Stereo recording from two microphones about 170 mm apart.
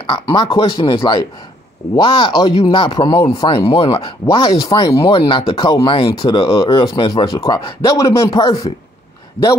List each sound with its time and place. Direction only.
0.0 s speech: 30° left (ahead or behind)